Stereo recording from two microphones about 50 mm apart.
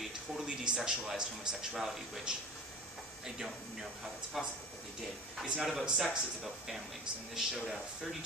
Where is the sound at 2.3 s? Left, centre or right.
Centre.